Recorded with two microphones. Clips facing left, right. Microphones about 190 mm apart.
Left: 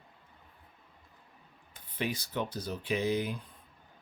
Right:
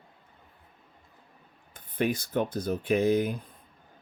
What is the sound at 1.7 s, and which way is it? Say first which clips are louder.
Speech: right 7 dB; 50° right (ahead or behind).